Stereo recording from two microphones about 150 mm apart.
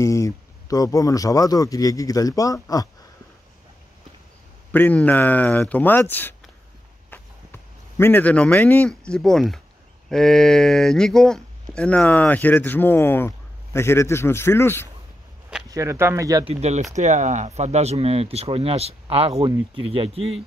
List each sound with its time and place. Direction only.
0.0 s speech: 20° left (ahead or behind)
4.7 s speech: 10° left (ahead or behind)
7.1 s a sound: 15° left (ahead or behind)
10.0 s speech: 5° left (ahead or behind)
15.7 s speech: 20° right (ahead or behind)
16.4 s speech: 45° right (ahead or behind)